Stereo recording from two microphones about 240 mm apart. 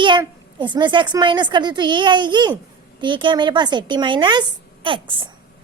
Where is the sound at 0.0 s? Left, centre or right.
Centre.